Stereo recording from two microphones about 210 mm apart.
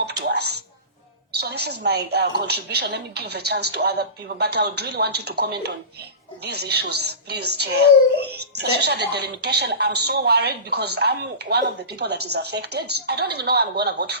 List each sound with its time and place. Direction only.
1.4 s a woman's voice: 50° right (ahead or behind)